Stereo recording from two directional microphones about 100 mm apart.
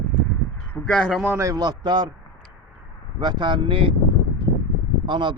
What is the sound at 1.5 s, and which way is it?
Speech, 45° right (ahead or behind).